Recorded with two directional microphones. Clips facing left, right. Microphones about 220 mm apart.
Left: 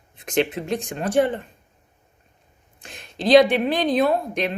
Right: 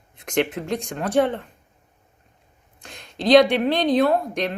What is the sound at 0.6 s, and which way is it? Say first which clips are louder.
Speech: left 1 dB; 20° left (ahead or behind).